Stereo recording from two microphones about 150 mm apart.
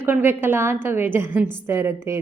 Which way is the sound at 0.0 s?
15° right (ahead or behind).